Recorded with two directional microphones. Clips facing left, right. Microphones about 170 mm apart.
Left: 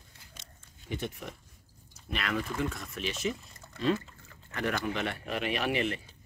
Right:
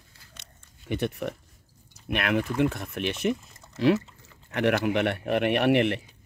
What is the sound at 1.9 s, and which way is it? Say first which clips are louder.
Speech: right 7 dB; 60° right (ahead or behind).